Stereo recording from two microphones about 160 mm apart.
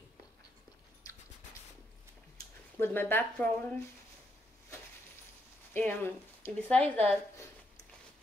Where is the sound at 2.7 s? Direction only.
15° left (ahead or behind).